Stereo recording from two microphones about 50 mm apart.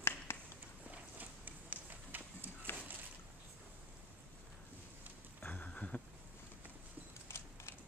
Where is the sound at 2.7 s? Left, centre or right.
Left.